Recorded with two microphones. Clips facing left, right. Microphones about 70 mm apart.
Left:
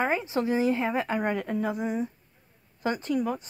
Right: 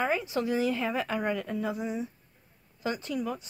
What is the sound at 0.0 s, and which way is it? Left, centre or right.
A woman's voice, left.